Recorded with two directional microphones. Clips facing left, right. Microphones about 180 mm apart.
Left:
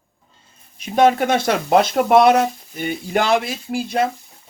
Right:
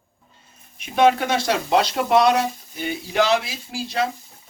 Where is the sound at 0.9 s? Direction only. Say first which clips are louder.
Left 2 dB; 45° left (ahead or behind).